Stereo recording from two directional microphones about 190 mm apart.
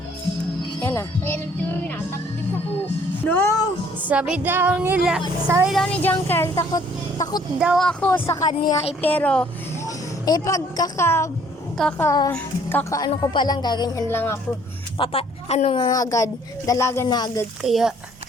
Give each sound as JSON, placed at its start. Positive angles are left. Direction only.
{"t": 0.8, "sound": "music", "side_deg": 10}
{"t": 3.2, "sound": "speech", "side_deg": 10}
{"t": 4.1, "sound": "speech", "side_deg": -5}
{"t": 5.7, "sound": "speech", "side_deg": 5}
{"t": 7.6, "sound": "a woman's voice", "side_deg": 0}
{"t": 9.8, "sound": "a woman's voice", "side_deg": 20}
{"t": 14.9, "sound": "speech", "side_deg": 30}
{"t": 15.8, "sound": "a woman's voice", "side_deg": 20}
{"t": 17.6, "sound": "speech", "side_deg": 0}